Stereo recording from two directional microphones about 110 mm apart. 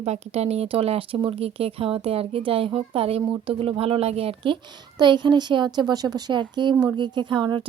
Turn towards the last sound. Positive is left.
turn(degrees=-45)  # may be behind; listen again after turning